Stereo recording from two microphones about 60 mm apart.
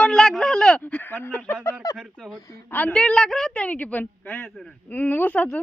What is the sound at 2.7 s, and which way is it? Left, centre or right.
Speech, left.